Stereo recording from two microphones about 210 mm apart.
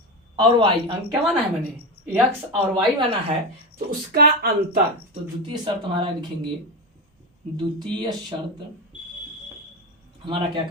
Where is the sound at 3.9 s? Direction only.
45° right (ahead or behind).